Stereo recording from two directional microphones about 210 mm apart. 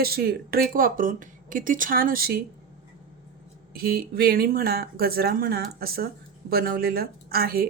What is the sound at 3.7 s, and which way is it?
Speech, 45° right (ahead or behind).